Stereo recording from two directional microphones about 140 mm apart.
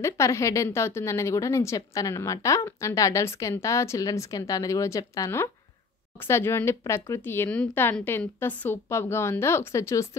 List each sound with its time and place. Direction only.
0.0 s a woman's voice: 20° left (ahead or behind)